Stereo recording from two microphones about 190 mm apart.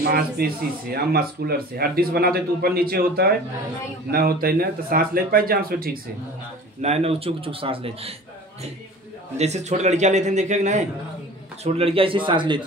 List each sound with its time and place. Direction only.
0.0 s speech: 55° right (ahead or behind)
6.8 s a man's voice: 35° right (ahead or behind)
9.4 s a man's voice: 35° right (ahead or behind)